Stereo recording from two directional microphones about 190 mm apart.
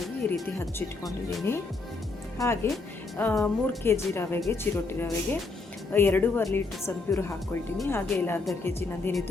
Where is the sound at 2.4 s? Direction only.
15° left (ahead or behind).